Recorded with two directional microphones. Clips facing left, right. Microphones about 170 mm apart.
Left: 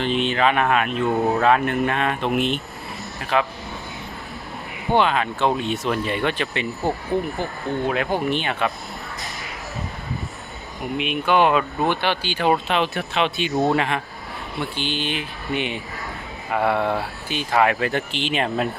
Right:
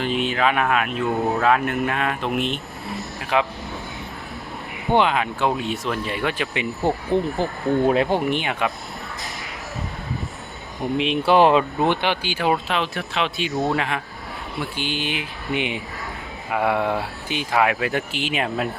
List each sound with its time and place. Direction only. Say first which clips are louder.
0.0 s speech: left 1 dB; 5° right (ahead or behind)
3.3 s speech: even; 15° right (ahead or behind)
4.9 s speech: even; 15° right (ahead or behind)
6.7 s speech: right 4 dB; centre (ahead or behind)
7.7 s speech: right 5 dB; 35° right (ahead or behind)
8.0 s speech: right 1 dB; 20° right (ahead or behind)
10.8 s speech: right 3 dB; 30° right (ahead or behind)
11.8 s speech: right 1 dB; 20° right (ahead or behind); by 14.0 s centre (ahead or behind)
14.8 s speech: even; 10° right (ahead or behind)